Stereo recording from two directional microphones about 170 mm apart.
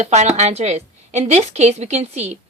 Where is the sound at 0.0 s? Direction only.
40° right (ahead or behind).